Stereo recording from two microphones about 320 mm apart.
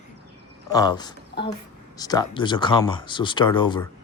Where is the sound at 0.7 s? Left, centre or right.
Centre.